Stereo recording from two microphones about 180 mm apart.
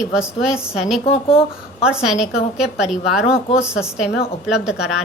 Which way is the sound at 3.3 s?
35° left (ahead or behind).